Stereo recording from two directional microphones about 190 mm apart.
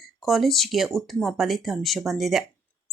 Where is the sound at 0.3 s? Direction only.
Centre (ahead or behind).